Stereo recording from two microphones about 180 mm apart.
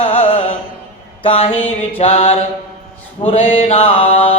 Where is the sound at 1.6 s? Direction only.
10° left (ahead or behind).